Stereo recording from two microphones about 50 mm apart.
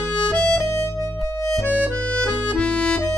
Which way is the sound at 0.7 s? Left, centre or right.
Left.